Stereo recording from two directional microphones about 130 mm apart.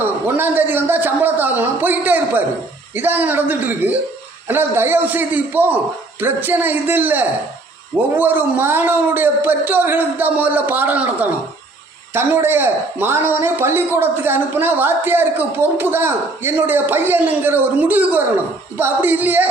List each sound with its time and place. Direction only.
0.0 s speech: 15° right (ahead or behind)